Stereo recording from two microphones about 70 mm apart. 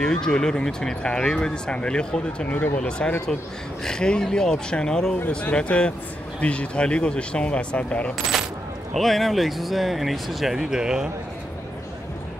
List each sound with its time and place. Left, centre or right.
0.0 s speech: centre
8.9 s speech: centre